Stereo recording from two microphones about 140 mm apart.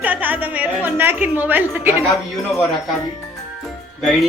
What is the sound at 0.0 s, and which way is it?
A woman's voice, 10° right (ahead or behind).